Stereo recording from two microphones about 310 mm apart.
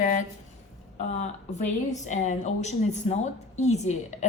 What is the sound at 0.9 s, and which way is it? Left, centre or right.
A woman's voice, left.